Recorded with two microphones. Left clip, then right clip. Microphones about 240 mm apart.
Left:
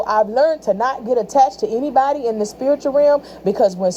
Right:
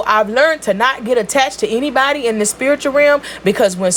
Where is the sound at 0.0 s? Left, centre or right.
Right.